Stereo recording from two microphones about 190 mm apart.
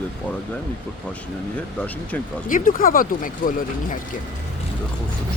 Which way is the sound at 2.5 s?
45° left (ahead or behind).